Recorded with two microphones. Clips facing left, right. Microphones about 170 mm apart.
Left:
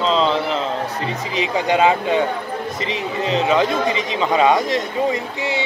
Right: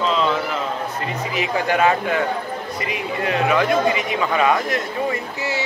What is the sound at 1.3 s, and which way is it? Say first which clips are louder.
A man's voice: left 2 dB; 20° left (ahead or behind).